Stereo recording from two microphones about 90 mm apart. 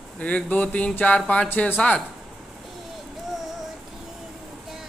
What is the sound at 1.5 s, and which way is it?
Speech, 20° left (ahead or behind).